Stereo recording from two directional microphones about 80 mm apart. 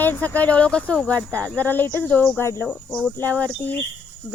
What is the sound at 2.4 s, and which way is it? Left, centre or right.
Speech, left.